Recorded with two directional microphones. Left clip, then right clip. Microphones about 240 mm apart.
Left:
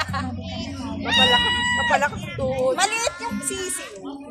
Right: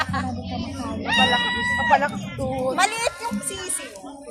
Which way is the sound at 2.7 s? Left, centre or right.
Centre.